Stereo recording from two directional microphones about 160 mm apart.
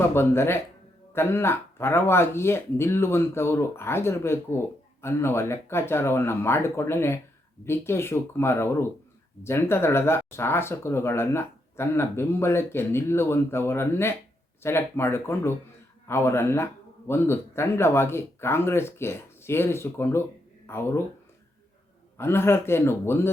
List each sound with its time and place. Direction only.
0.1 s speech: 15° left (ahead or behind)
22.2 s speech: 15° left (ahead or behind)